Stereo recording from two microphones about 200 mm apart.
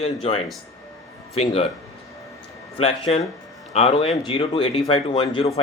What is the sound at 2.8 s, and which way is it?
Speech, 30° left (ahead or behind).